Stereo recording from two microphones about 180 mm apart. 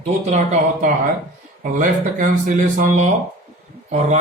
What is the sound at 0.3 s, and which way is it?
Speech, 40° right (ahead or behind).